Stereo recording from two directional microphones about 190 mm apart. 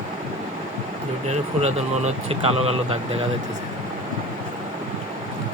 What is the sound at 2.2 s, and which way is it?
Speech, 30° right (ahead or behind).